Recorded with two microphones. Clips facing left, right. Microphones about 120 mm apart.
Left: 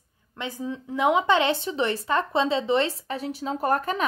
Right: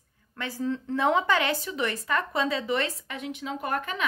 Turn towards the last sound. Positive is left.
turn(degrees=35)  # may be behind; listen again after turning